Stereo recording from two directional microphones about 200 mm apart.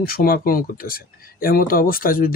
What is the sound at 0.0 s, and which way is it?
Speech, 45° left (ahead or behind).